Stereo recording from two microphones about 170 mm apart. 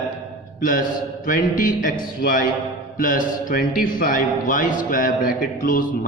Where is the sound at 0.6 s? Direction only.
55° left (ahead or behind).